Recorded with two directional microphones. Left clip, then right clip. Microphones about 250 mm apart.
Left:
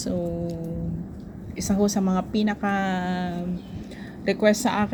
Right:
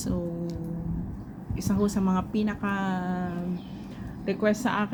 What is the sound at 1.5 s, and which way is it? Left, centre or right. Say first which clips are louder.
Speech: left 4 dB; centre.